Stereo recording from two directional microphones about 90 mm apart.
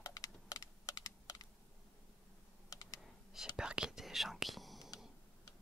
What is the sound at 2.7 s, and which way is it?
Computer keyboard, 40° left (ahead or behind).